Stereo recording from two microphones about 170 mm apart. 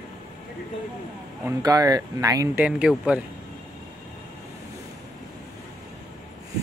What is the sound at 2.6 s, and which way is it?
Speech, 5° right (ahead or behind).